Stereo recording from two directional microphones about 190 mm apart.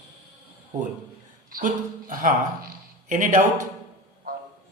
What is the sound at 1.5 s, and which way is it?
Speech, 45° right (ahead or behind).